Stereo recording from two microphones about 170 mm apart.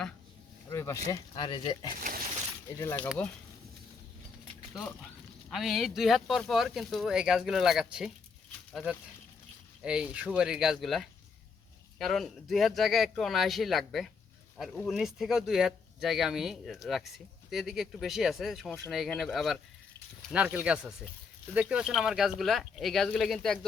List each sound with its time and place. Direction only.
0.7 s speech: 15° left (ahead or behind)
1.4 s speech: 30° left (ahead or behind)
2.0 s speech: 55° right (ahead or behind)
2.6 s speech: 15° left (ahead or behind)
4.7 s speech: 5° left (ahead or behind)